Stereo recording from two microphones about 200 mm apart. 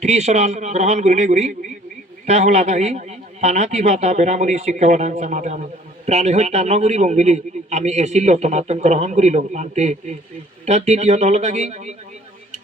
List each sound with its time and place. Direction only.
0.0 s a man's voice: 35° right (ahead or behind)